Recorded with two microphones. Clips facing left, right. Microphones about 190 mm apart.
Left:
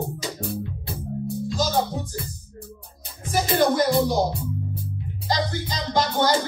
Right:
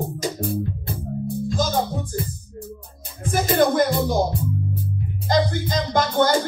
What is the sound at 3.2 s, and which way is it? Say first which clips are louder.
Music: right 2 dB; 50° right (ahead or behind).